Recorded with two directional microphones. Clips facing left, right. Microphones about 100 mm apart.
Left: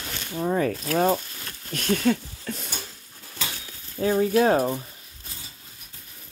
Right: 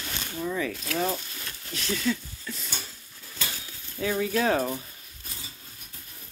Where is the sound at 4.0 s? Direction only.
35° left (ahead or behind).